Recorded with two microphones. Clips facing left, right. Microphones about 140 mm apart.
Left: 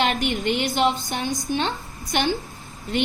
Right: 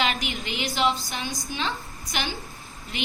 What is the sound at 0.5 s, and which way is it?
A woman's voice, 55° left (ahead or behind).